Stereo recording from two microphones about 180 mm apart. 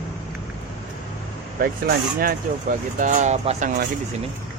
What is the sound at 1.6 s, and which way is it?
Speech, 55° right (ahead or behind).